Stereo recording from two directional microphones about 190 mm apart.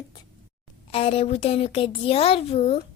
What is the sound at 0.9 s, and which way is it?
A woman's voice, 30° left (ahead or behind).